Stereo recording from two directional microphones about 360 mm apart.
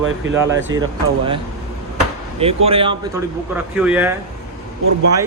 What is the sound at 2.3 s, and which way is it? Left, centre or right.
Speech, centre.